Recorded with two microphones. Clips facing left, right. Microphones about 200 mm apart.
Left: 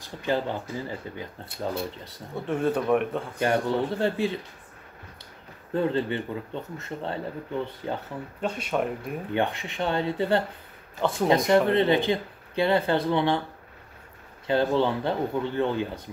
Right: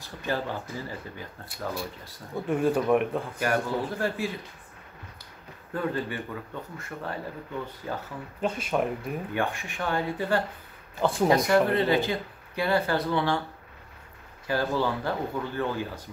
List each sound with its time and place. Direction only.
0.0 s speech: 20° left (ahead or behind)
2.4 s speech: 5° right (ahead or behind)
3.3 s speech: 25° left (ahead or behind)
5.7 s speech: 25° left (ahead or behind)
8.4 s speech: centre (ahead or behind)
9.3 s speech: 20° left (ahead or behind)
14.5 s speech: 25° left (ahead or behind)